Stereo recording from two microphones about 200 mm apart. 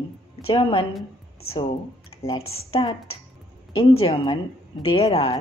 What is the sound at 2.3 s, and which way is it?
Speech, 90° left.